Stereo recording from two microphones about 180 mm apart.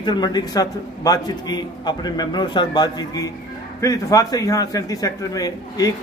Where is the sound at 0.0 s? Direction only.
25° left (ahead or behind).